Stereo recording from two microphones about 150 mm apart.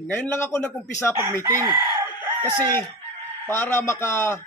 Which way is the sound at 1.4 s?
20° right (ahead or behind).